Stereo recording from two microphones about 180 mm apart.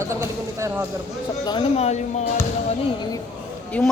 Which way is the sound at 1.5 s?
30° left (ahead or behind).